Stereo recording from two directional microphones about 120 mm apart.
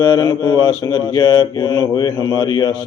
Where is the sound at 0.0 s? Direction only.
30° left (ahead or behind).